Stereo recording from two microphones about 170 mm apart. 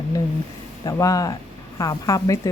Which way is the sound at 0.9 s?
20° left (ahead or behind).